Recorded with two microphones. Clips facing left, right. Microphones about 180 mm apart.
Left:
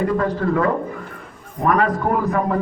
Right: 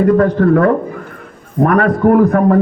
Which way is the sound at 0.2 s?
55° right (ahead or behind).